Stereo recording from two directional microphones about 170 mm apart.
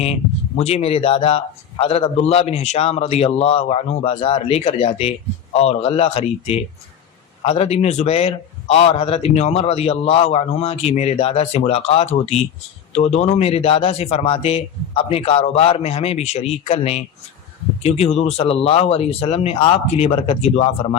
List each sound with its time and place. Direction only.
0.0 s speech: 40° left (ahead or behind)